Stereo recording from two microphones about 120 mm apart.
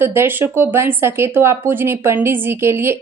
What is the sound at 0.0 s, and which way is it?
Speech, 20° right (ahead or behind).